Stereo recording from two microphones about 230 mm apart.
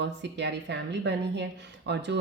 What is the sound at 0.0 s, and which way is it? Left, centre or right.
Speech, right.